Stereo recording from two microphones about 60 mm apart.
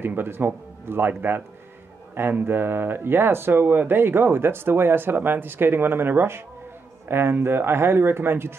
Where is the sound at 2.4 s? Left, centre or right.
Right.